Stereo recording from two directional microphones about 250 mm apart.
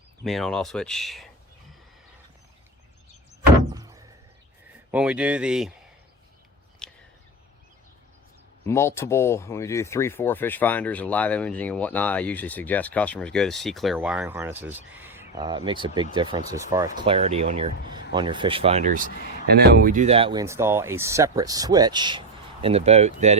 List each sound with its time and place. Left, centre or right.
0.3 s speech: centre
3.7 s door: centre
4.9 s speech: centre
6.8 s a sound: centre
8.6 s speech: centre
17.0 s speech: right